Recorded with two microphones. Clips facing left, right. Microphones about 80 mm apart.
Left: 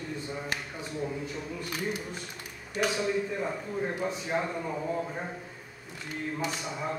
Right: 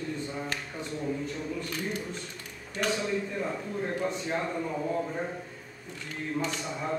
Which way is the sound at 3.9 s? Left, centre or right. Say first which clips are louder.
Even; centre.